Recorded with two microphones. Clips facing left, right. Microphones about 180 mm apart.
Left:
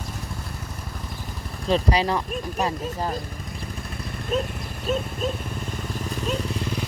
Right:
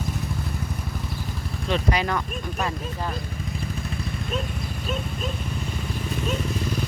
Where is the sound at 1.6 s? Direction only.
35° left (ahead or behind).